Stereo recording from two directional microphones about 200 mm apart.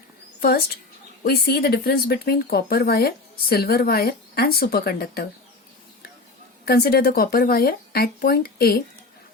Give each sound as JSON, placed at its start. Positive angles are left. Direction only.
{"t": 0.3, "sound": "a woman's voice", "side_deg": 50}
{"t": 6.7, "sound": "speech", "side_deg": 50}